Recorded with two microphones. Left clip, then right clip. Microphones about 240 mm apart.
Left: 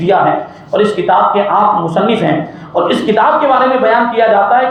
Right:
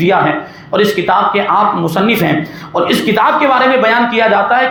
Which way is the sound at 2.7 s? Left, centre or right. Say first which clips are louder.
Left 1 dB; right.